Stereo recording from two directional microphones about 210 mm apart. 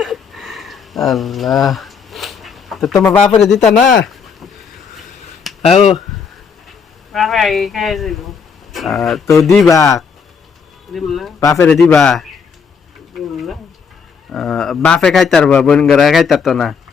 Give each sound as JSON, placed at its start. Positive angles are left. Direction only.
{"t": 0.0, "sound": "a sound", "side_deg": 0}
{"t": 3.0, "sound": "a man's voice", "side_deg": 5}
{"t": 5.6, "sound": "speech", "side_deg": 30}
{"t": 7.1, "sound": "a man's voice", "side_deg": 0}
{"t": 9.6, "sound": "a man's voice", "side_deg": 15}
{"t": 10.9, "sound": "a man's voice", "side_deg": 0}
{"t": 11.3, "sound": "a man's voice", "side_deg": 15}
{"t": 13.1, "sound": "a sound", "side_deg": 0}
{"t": 14.3, "sound": "a man's voice", "side_deg": 5}